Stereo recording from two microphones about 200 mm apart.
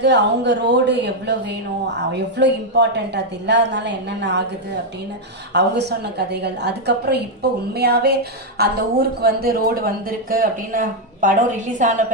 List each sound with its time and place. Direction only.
0.0 s a woman's voice: 60° right (ahead or behind)
5.5 s a woman's voice: 55° right (ahead or behind); by 12.0 s 40° right (ahead or behind)